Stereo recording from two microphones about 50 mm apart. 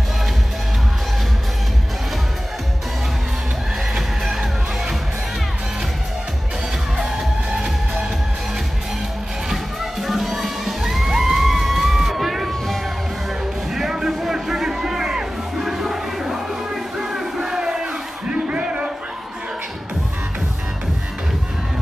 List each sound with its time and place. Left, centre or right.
3.9 s music: centre
7.0 s music: centre
9.5 s music: centre
13.7 s music: centre
17.0 s crowd: centre
18.3 s a sound: right